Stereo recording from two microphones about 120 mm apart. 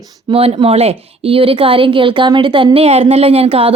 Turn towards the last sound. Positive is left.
turn(degrees=-50)  # may be behind; listen again after turning